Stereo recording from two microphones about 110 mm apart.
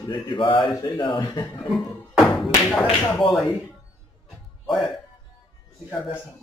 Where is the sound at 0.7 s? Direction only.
35° left (ahead or behind).